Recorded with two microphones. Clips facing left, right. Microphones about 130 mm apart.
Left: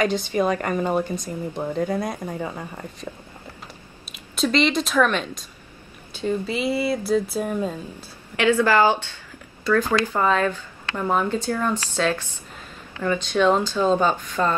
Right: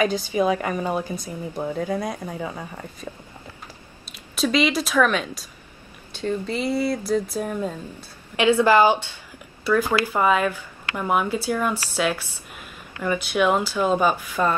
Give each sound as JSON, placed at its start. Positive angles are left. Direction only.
{"t": 0.0, "sound": "speech", "side_deg": -5}
{"t": 4.4, "sound": "speech", "side_deg": -5}
{"t": 8.4, "sound": "speech", "side_deg": -15}